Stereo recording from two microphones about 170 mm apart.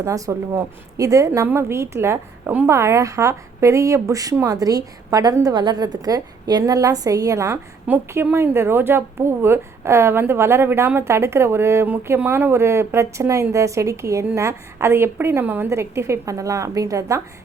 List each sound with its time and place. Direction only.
0.0 s a woman's voice: 20° right (ahead or behind)